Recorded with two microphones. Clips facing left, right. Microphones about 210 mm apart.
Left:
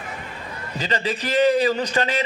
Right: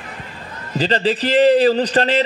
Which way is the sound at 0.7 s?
30° right (ahead or behind).